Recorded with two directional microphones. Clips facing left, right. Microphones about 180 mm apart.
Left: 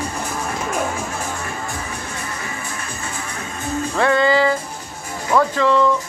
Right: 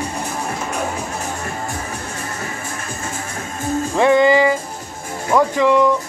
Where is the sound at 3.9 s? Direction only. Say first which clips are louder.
Right 4 dB; 15° right (ahead or behind).